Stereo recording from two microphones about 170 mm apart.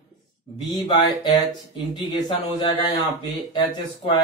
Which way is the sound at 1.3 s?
25° left (ahead or behind).